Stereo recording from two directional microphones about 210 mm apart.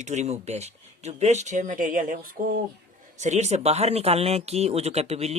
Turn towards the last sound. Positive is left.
turn(degrees=-30)  # may be behind; listen again after turning